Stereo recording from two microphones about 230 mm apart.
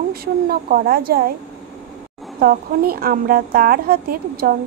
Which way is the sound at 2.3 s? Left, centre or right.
Right.